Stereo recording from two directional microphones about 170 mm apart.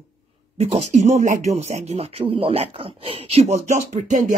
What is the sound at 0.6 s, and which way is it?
Speech, 40° right (ahead or behind).